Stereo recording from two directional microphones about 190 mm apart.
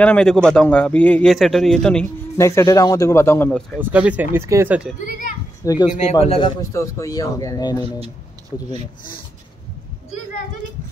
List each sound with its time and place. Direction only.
0.0 s a man's voice: 5° left (ahead or behind)
2.3 s a man's voice: 15° left (ahead or behind)
3.8 s speech: 10° right (ahead or behind)
5.6 s speech: 20° left (ahead or behind)
6.2 s speech: 30° left (ahead or behind)
6.7 s a man's voice: 15° left (ahead or behind)